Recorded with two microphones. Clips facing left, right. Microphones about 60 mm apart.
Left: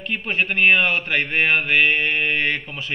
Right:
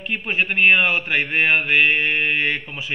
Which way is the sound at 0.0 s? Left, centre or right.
Centre.